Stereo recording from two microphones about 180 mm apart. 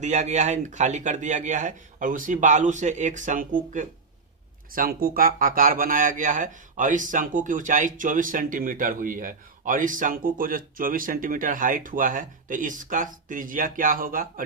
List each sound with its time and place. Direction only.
0.0 s speech: 40° right (ahead or behind)